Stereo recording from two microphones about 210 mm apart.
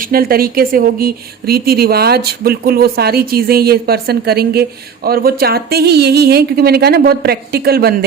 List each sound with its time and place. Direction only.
0.0 s a woman's voice: 45° right (ahead or behind)